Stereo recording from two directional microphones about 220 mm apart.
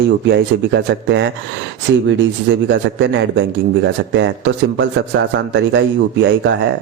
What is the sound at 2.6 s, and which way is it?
Speech, 55° right (ahead or behind).